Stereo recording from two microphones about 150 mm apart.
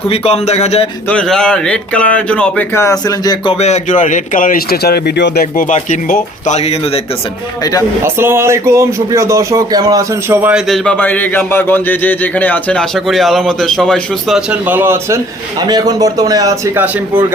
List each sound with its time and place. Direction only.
0.1 s speech: 45° left (ahead or behind)
1.1 s speech: 5° left (ahead or behind); by 3.5 s 25° left (ahead or behind)
3.5 s speech: 50° left (ahead or behind); by 5.7 s 80° left
5.7 s speech: 65° left (ahead or behind)
6.5 s speech: 45° left (ahead or behind)
7.6 s a man's voice: 25° left (ahead or behind)
8.0 s speech: 15° right (ahead or behind)
10.7 s a man's voice: 10° left (ahead or behind); by 15.2 s 15° right (ahead or behind)
15.6 s speech: 25° right (ahead or behind)